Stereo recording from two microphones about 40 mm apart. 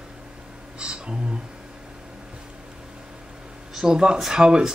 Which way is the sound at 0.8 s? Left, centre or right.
Right.